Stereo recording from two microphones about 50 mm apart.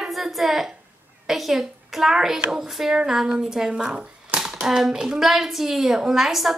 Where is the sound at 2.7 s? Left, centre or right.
Centre.